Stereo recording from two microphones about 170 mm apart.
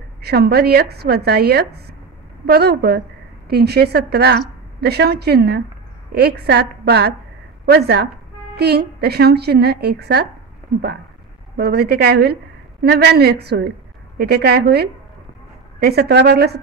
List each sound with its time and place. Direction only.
0.2 s a woman's voice: 70° right (ahead or behind)
11.5 s a woman's voice: 70° right (ahead or behind)